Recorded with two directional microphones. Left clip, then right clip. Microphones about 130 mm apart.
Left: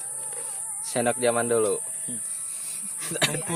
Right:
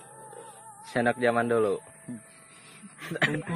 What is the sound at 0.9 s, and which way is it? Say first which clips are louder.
Speech: left 1 dB; 20° left (ahead or behind).